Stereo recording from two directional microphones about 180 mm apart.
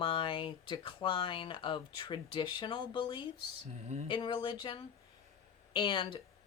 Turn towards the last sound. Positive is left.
turn(degrees=25)  # may be behind; listen again after turning